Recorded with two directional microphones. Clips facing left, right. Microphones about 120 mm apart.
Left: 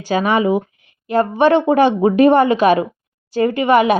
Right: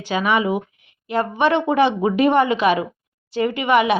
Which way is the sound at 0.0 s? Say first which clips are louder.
Left 4 dB; 40° left (ahead or behind).